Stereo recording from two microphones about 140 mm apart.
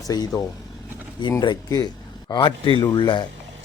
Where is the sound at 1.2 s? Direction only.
30° left (ahead or behind).